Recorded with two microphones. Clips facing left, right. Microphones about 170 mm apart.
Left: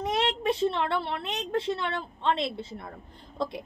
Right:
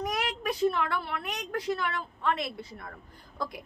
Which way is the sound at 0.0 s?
25° left (ahead or behind).